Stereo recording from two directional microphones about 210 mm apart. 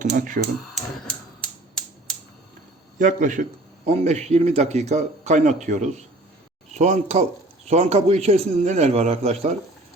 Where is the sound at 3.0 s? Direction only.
40° right (ahead or behind).